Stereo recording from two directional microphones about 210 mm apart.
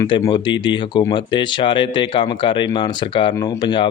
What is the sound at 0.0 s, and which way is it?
Speech, 20° left (ahead or behind).